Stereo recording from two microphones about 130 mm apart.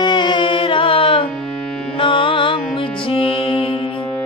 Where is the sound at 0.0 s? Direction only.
35° left (ahead or behind).